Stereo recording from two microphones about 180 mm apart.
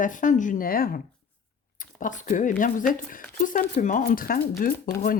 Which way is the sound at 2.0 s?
45° left (ahead or behind).